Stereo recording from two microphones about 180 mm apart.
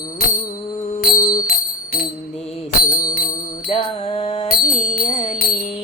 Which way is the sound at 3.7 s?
35° left (ahead or behind).